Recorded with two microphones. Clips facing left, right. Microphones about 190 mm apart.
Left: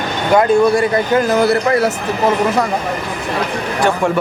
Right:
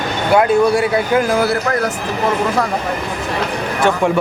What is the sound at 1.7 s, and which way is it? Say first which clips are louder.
Speech: left 4 dB; 10° left (ahead or behind).